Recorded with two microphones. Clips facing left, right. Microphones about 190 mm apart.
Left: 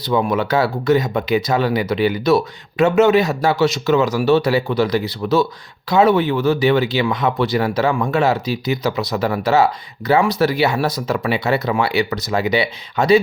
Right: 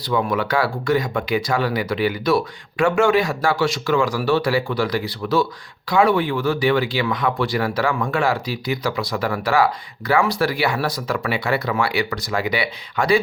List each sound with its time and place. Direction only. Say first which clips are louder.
0.0 s speech: left 3 dB; 20° left (ahead or behind)